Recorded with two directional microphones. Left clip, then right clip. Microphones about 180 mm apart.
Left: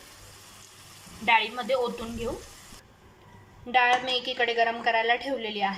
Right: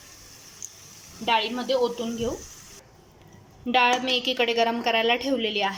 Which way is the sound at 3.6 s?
15° right (ahead or behind).